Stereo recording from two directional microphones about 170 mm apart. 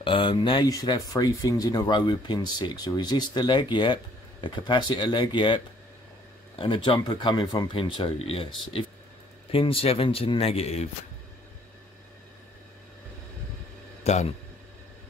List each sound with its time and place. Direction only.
0.0 s speech: 30° left (ahead or behind)
6.6 s speech: 30° left (ahead or behind)
14.0 s speech: 40° left (ahead or behind)